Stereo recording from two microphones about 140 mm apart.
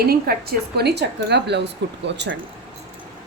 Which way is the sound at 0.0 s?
90° right.